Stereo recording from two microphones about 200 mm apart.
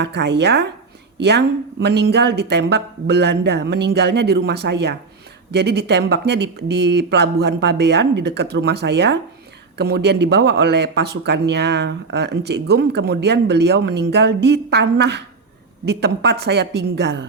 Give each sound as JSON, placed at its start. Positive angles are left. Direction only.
{"t": 0.0, "sound": "speech", "side_deg": -60}